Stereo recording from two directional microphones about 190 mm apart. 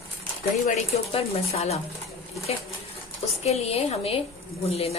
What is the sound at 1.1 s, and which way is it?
Speech, 35° left (ahead or behind).